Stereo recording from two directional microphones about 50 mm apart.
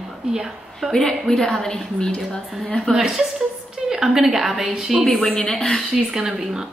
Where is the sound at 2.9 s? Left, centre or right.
Centre.